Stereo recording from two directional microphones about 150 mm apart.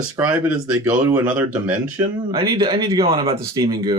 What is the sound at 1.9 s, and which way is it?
Speech, 25° right (ahead or behind).